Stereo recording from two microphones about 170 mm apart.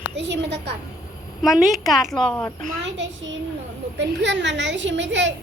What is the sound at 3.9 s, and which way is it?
A woman's voice, 90° right.